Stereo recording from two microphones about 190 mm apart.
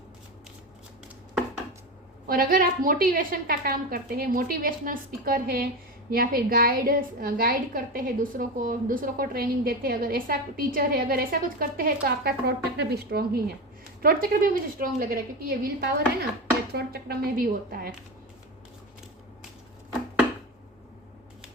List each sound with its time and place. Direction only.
2.2 s a woman's voice: 50° right (ahead or behind)